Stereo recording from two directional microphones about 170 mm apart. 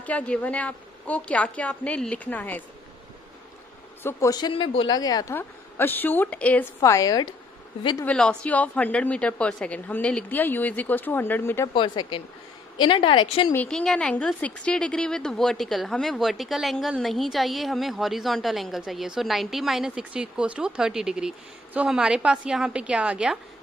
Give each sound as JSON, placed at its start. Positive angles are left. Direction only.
{"t": 0.0, "sound": "a woman's voice", "side_deg": 10}
{"t": 4.0, "sound": "a woman's voice", "side_deg": 20}
{"t": 8.0, "sound": "a woman's voice", "side_deg": 5}
{"t": 11.7, "sound": "a woman's voice", "side_deg": 30}
{"t": 13.5, "sound": "a woman's voice", "side_deg": 5}